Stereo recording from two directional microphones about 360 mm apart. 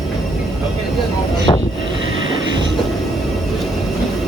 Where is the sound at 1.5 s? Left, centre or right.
Centre.